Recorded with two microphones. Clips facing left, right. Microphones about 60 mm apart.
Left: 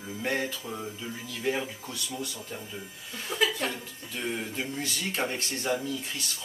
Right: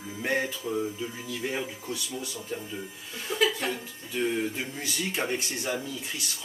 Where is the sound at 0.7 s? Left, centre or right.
Centre.